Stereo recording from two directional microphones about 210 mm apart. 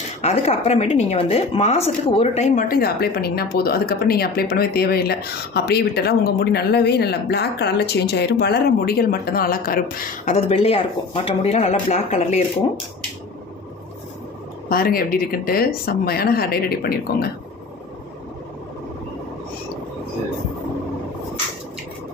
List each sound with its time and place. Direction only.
0.2 s a woman's voice: 30° left (ahead or behind)
14.7 s a woman's voice: 45° left (ahead or behind)